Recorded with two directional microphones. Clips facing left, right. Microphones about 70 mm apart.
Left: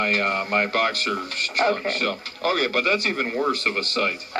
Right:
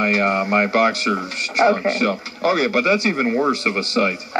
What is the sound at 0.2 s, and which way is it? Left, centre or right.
Speech, right.